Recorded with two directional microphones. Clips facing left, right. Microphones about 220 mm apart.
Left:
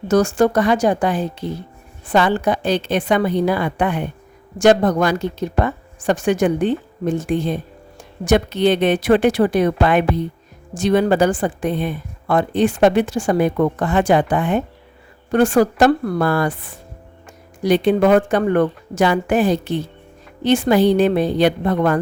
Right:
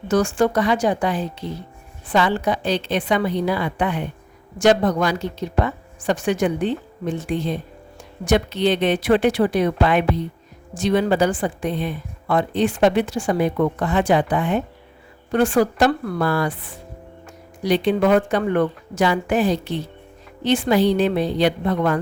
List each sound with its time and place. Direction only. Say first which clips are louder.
0.1 s a woman's voice: left 3 dB; 40° left (ahead or behind)